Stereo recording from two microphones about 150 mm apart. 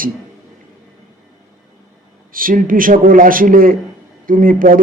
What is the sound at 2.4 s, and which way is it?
A man's voice, 65° right (ahead or behind).